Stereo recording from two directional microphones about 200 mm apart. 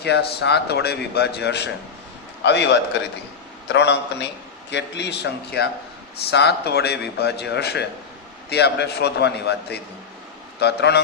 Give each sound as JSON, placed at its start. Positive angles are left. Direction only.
{"t": 0.0, "sound": "a man's voice", "side_deg": 55}